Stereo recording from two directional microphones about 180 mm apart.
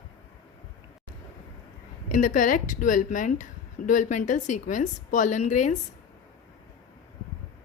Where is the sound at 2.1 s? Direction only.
45° left (ahead or behind).